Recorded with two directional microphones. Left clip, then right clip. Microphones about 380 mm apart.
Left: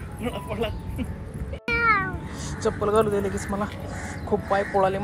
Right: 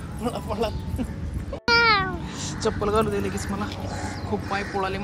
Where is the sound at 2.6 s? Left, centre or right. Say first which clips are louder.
Left 1 dB; centre.